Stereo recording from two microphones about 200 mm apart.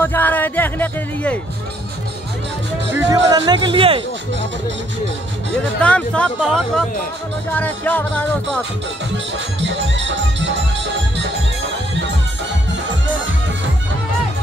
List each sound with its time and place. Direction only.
0.0 s speech: 10° left (ahead or behind)
2.9 s speech: 20° right (ahead or behind)
5.8 s speech: 5° left (ahead or behind)
9.1 s speech: 65° right (ahead or behind)